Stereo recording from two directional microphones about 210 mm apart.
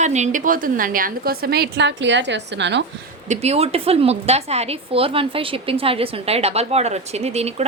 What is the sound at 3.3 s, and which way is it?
A woman's voice, 30° right (ahead or behind).